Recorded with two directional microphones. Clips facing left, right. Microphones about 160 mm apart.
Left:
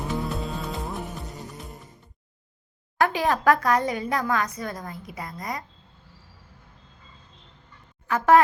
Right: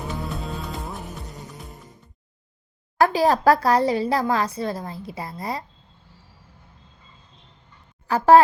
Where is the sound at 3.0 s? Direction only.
35° right (ahead or behind).